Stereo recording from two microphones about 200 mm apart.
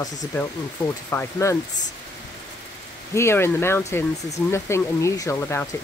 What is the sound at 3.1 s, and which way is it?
Speech, 10° left (ahead or behind).